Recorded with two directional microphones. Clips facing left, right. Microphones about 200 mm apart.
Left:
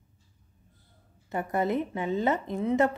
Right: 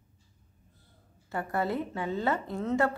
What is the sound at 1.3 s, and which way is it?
A woman's voice, 20° left (ahead or behind).